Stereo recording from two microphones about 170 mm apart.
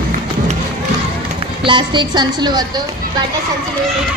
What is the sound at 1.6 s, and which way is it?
A woman's voice, 30° right (ahead or behind).